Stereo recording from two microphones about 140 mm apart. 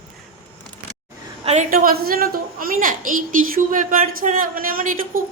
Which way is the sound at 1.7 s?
90° right.